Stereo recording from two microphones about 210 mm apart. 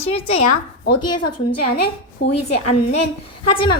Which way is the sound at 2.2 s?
55° left (ahead or behind).